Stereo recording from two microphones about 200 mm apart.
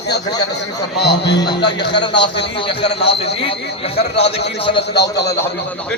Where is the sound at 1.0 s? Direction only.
60° left (ahead or behind).